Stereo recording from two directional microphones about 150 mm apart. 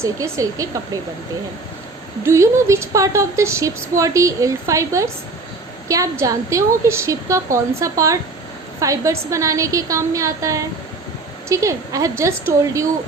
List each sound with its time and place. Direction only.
0.0 s speech: 20° right (ahead or behind)
2.2 s speech: 20° right (ahead or behind)